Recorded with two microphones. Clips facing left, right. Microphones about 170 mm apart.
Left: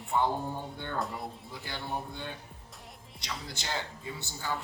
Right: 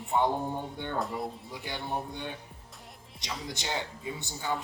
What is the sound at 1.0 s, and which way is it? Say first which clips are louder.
Speech: right 3 dB; centre (ahead or behind).